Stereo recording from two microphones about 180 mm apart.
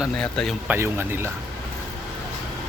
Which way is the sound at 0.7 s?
10° right (ahead or behind).